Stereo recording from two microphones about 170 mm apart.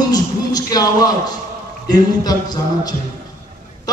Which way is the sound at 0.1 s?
25° left (ahead or behind).